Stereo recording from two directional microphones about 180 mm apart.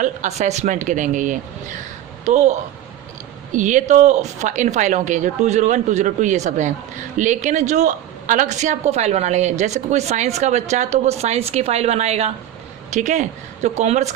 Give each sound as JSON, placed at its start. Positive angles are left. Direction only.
{"t": 0.0, "sound": "a woman's voice", "side_deg": -40}